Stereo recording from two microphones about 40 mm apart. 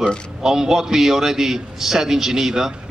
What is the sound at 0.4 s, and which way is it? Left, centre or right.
A man's voice, centre.